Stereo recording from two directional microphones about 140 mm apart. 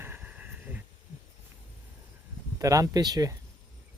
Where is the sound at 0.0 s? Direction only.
15° right (ahead or behind).